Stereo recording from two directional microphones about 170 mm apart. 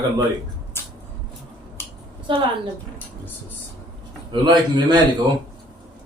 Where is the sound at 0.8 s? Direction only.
15° left (ahead or behind).